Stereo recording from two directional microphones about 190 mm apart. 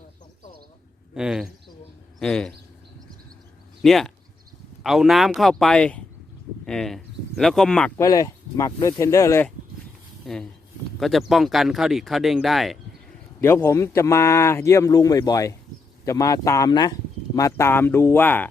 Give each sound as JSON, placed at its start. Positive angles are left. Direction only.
{"t": 1.1, "sound": "speech", "side_deg": -5}
{"t": 3.8, "sound": "speech", "side_deg": 0}
{"t": 7.9, "sound": "speech", "side_deg": 20}
{"t": 10.3, "sound": "speech", "side_deg": 0}
{"t": 13.4, "sound": "speech", "side_deg": 10}